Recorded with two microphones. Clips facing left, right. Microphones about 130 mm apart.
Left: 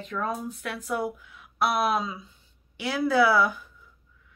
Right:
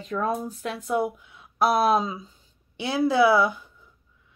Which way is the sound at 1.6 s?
35° right (ahead or behind).